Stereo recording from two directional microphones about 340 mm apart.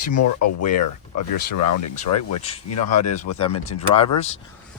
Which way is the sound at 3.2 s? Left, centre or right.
Centre.